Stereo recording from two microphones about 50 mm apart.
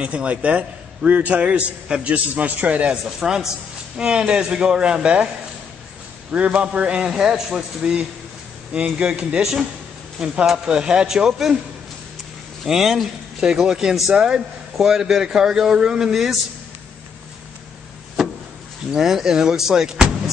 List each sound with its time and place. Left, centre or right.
0.0 s a man's voice: right
3.2 s a man's voice: centre
6.3 s a man's voice: right
7.0 s a man's voice: centre
9.4 s a man's voice: centre
12.6 s a man's voice: centre
18.9 s a man's voice: centre